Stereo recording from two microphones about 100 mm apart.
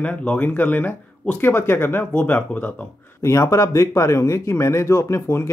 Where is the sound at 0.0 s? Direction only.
15° left (ahead or behind).